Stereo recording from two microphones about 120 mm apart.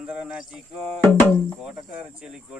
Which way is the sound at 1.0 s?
15° left (ahead or behind).